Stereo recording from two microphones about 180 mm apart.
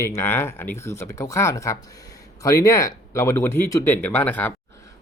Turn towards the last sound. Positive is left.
turn(degrees=10)  # may be behind; listen again after turning